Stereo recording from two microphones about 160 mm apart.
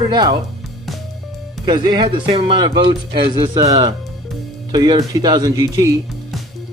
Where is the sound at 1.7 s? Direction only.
25° right (ahead or behind).